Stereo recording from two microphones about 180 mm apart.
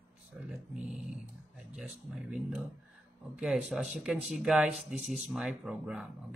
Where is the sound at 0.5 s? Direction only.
Centre (ahead or behind).